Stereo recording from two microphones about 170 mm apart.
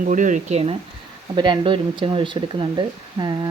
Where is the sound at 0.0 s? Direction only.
50° right (ahead or behind).